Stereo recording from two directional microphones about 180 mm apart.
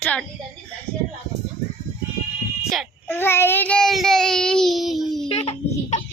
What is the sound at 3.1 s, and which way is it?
A child's voice, 15° left (ahead or behind).